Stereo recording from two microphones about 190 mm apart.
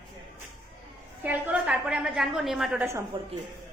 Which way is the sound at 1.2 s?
10° right (ahead or behind).